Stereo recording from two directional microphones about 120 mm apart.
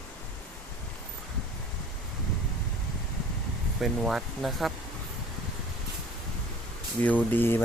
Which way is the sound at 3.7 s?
5° right (ahead or behind).